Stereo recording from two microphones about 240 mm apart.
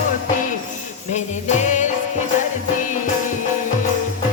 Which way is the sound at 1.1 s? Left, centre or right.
Left.